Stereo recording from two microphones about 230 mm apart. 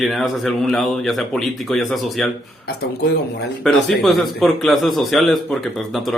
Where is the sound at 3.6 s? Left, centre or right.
Centre.